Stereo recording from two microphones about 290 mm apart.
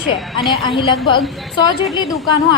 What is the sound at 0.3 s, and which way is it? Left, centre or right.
A woman's voice, centre.